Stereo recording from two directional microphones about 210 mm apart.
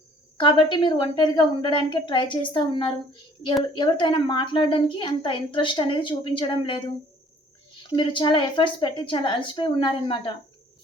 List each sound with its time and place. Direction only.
0.3 s a woman's voice: 20° left (ahead or behind)
7.9 s a woman's voice: 20° left (ahead or behind)